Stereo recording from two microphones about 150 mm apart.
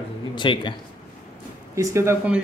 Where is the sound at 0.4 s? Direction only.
30° left (ahead or behind).